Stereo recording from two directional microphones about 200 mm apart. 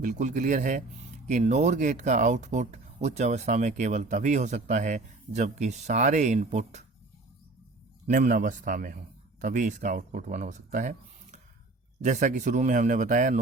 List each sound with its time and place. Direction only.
0.0 s speech: 40° right (ahead or behind)
8.0 s speech: 40° right (ahead or behind)